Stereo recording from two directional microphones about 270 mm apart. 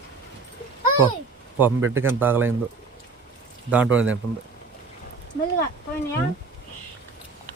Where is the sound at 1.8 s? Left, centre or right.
Right.